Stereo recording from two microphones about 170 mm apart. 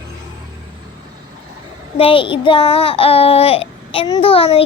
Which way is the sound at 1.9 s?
30° left (ahead or behind).